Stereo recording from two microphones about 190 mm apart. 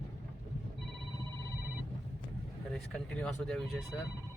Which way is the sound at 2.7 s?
5° left (ahead or behind).